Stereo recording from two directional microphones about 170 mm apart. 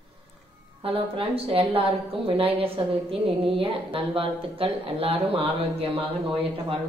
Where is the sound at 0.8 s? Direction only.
35° right (ahead or behind).